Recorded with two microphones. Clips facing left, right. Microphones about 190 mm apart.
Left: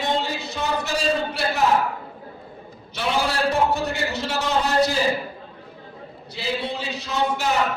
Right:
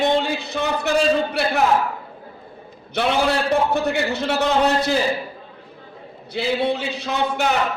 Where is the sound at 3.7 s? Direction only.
60° right (ahead or behind).